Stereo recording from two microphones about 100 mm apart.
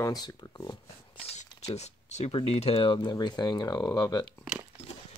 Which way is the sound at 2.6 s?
60° left (ahead or behind).